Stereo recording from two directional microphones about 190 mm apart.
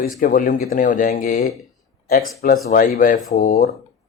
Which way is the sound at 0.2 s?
50° left (ahead or behind).